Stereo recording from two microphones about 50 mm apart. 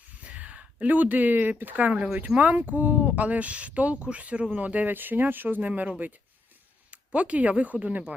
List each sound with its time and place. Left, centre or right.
0.2 s a sound: right
0.9 s speech: right
6.9 s speech: right